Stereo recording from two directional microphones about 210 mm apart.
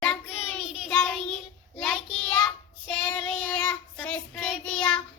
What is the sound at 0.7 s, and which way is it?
Child singing, centre (ahead or behind).